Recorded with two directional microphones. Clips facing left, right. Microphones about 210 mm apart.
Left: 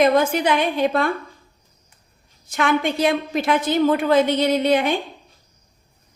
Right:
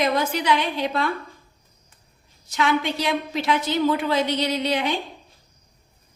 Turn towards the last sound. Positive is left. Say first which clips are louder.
# left 6 dB
turn(degrees=50)  # may be behind; listen again after turning